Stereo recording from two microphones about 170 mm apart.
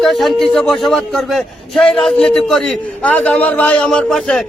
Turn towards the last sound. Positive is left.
turn(degrees=5)  # may be behind; listen again after turning